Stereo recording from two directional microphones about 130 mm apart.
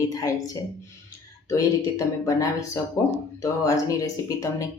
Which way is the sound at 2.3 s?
25° left (ahead or behind).